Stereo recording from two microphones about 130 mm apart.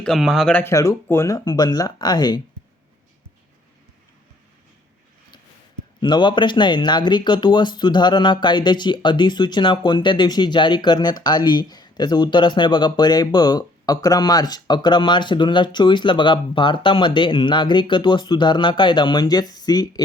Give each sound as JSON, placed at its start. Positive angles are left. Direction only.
{"t": 0.0, "sound": "speech", "side_deg": 0}
{"t": 0.5, "sound": "speech", "side_deg": 20}
{"t": 6.0, "sound": "speech", "side_deg": 35}